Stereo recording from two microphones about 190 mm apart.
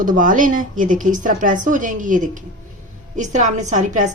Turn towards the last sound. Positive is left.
turn(degrees=-40)  # may be behind; listen again after turning